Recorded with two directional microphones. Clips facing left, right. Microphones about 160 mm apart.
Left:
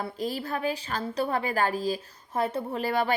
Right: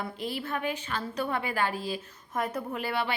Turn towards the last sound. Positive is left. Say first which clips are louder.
# left 4 dB
turn(degrees=40)  # may be behind; listen again after turning